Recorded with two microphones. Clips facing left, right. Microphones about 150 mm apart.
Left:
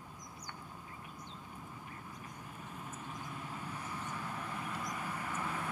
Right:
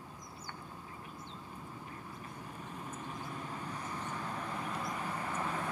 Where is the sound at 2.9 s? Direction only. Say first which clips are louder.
Right 3 dB; 35° right (ahead or behind).